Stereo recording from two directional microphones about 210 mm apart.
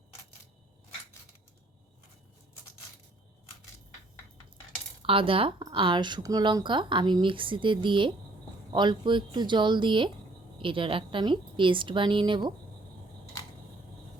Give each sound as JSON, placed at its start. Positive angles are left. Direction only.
{"t": 5.0, "sound": "speech", "side_deg": -25}